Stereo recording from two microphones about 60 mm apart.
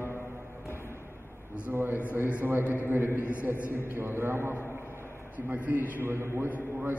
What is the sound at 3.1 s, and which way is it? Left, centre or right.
Speech, left.